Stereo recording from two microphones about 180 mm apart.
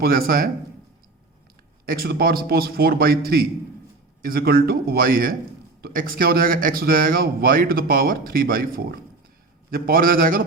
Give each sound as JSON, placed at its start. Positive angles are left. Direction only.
{"t": 0.0, "sound": "speech", "side_deg": -55}
{"t": 1.9, "sound": "a man's voice", "side_deg": -55}